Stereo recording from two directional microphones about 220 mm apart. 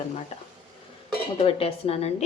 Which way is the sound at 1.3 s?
25° left (ahead or behind).